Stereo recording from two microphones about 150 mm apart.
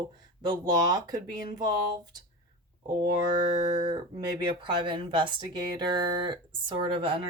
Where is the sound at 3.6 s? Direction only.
25° right (ahead or behind).